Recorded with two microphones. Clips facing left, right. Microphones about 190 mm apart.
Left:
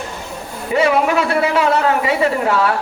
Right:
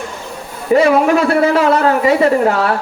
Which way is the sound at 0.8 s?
40° right (ahead or behind).